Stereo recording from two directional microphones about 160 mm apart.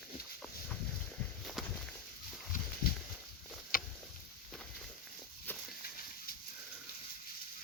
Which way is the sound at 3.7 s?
60° left (ahead or behind).